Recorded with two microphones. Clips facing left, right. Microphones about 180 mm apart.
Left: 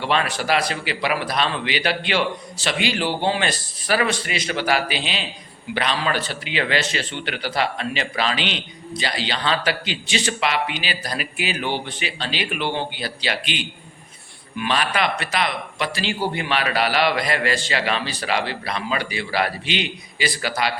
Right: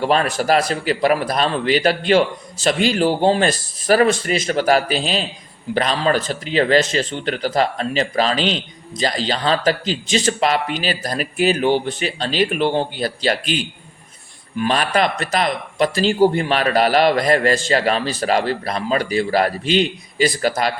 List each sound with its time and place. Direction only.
0.0 s a man's voice: 40° right (ahead or behind)